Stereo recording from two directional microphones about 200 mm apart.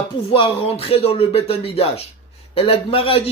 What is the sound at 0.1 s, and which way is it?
Speech, 25° left (ahead or behind).